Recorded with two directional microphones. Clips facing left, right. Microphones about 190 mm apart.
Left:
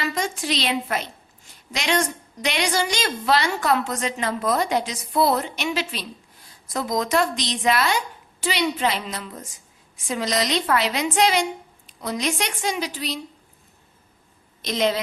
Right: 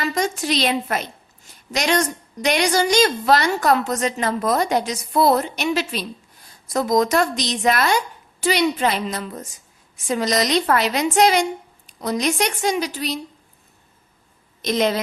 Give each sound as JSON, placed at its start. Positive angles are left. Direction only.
{"t": 0.1, "sound": "a woman's voice", "side_deg": -40}
{"t": 14.6, "sound": "a woman's voice", "side_deg": -50}